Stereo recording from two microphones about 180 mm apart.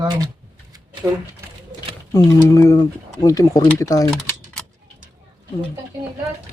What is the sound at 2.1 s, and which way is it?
Speech, 15° left (ahead or behind).